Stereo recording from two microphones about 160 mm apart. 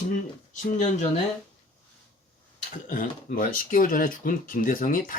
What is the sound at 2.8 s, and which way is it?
Speech, 55° left (ahead or behind).